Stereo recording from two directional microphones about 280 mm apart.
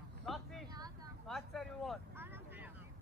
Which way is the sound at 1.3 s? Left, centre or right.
Centre.